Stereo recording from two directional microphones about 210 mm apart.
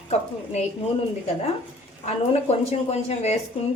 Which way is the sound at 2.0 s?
30° left (ahead or behind).